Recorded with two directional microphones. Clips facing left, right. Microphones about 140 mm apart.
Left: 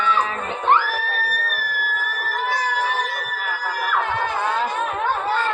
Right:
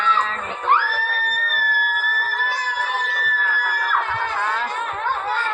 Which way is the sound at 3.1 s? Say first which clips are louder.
Right 2 dB; 15° left (ahead or behind).